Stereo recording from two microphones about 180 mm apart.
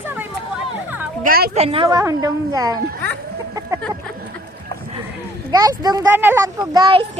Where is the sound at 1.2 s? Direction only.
55° right (ahead or behind).